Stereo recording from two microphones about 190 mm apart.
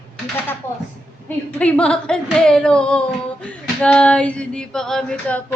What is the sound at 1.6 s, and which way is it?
Female singing, 5° left (ahead or behind).